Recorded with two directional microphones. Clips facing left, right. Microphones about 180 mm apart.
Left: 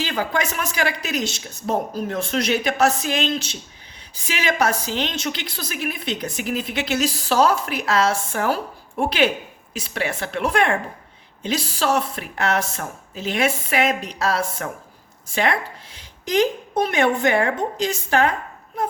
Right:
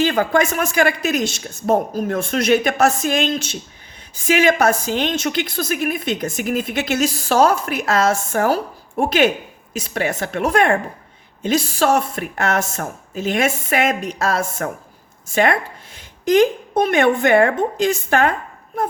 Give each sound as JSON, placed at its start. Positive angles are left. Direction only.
{"t": 0.0, "sound": "a woman's voice", "side_deg": -50}